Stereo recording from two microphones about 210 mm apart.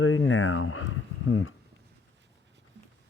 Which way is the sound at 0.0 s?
70° left (ahead or behind).